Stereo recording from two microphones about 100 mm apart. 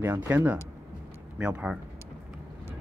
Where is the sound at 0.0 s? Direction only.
20° right (ahead or behind).